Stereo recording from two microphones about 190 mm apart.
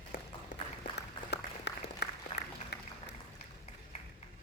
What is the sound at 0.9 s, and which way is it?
Applause, 60° left (ahead or behind).